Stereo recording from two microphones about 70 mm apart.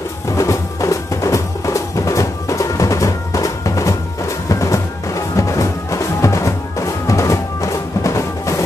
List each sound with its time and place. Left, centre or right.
0.4 s music: left